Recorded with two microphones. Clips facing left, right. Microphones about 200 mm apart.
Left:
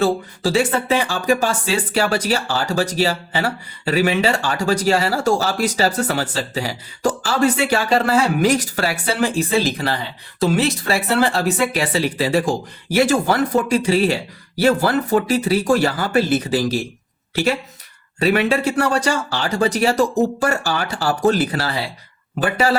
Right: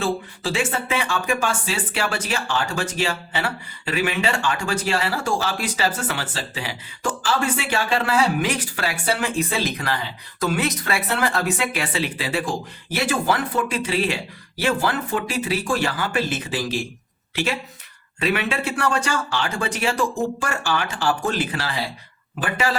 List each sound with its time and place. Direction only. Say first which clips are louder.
0.0 s speech: left 6 dB; 40° left (ahead or behind)
18.2 s speech: left 6 dB; 40° left (ahead or behind)